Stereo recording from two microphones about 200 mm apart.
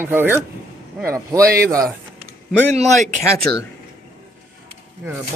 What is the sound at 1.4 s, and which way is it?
Speech, 50° right (ahead or behind).